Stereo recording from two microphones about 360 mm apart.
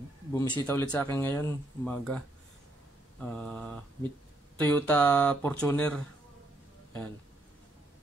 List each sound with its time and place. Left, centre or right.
0.3 s speech: centre